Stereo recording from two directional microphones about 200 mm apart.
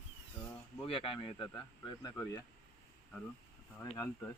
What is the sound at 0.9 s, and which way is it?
Speech, 25° left (ahead or behind).